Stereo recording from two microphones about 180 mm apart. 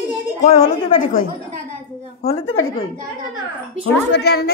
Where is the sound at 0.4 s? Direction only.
45° left (ahead or behind).